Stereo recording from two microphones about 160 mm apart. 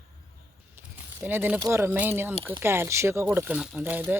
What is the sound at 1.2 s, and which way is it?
Speech, 10° right (ahead or behind).